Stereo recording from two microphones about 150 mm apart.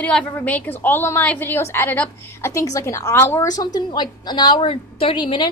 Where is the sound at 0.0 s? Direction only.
10° left (ahead or behind).